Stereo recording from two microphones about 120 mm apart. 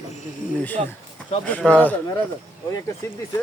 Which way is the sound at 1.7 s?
15° left (ahead or behind).